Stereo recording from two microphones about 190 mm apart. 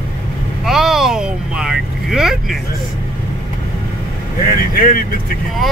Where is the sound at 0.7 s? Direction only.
Centre (ahead or behind).